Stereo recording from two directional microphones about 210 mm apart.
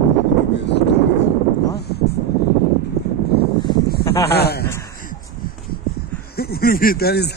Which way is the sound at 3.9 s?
50° left (ahead or behind).